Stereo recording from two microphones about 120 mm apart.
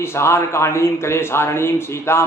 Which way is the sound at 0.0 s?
20° left (ahead or behind).